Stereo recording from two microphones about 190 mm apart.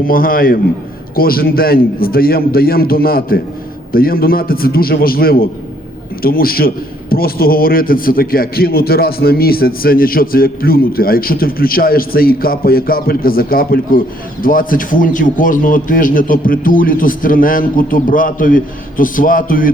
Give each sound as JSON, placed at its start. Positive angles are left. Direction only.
{"t": 0.0, "sound": "a man's voice", "side_deg": 50}